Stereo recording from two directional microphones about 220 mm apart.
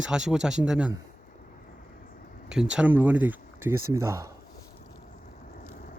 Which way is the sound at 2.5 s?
5° right (ahead or behind).